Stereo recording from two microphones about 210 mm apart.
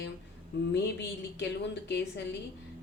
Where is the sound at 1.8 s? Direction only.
55° left (ahead or behind).